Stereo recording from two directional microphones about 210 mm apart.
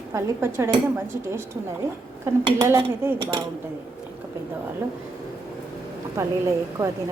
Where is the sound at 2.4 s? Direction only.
15° right (ahead or behind).